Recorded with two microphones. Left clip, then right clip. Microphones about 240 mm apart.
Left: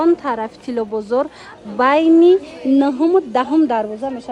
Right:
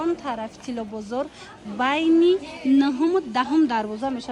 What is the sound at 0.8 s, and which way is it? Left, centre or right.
Speech, left.